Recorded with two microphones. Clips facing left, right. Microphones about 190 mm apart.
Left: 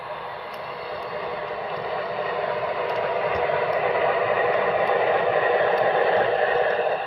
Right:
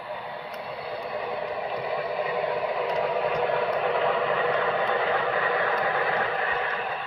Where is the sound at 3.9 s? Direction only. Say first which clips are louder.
Left 3 dB; 5° left (ahead or behind); by 6.8 s 35° left (ahead or behind).